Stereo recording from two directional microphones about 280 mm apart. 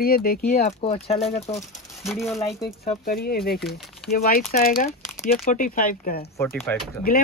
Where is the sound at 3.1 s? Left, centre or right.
Left.